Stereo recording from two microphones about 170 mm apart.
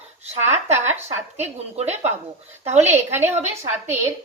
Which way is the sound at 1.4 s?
40° right (ahead or behind).